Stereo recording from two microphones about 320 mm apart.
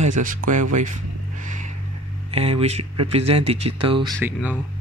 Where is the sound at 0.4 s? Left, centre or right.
Right.